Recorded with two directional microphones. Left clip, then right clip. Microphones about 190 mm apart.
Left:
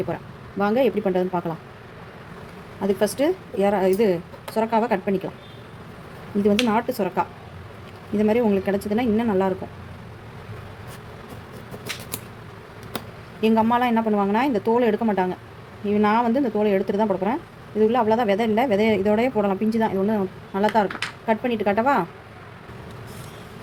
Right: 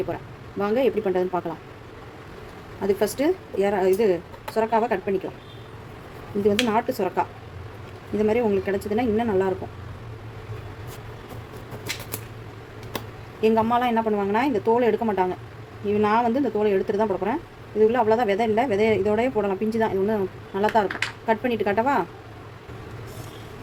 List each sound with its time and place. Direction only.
0.6 s speech: 15° left (ahead or behind)
2.8 s speech: 10° left (ahead or behind)
6.4 s speech: 15° left (ahead or behind)
13.4 s speech: 15° left (ahead or behind)